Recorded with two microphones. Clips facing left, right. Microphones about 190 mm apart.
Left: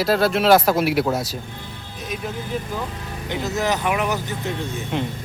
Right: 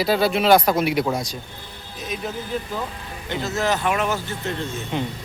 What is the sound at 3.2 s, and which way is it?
Speech, 20° left (ahead or behind).